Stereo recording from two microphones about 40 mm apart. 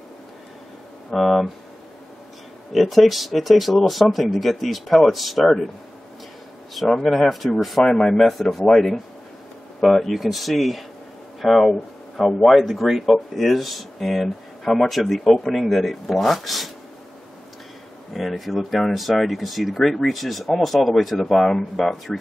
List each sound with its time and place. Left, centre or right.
1.1 s speech: centre
2.7 s speech: centre
6.7 s speech: centre
7.8 s speech: centre
8.6 s speech: centre
18.1 s speech: centre